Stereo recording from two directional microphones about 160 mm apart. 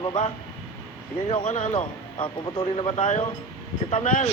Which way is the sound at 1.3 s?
45° left (ahead or behind).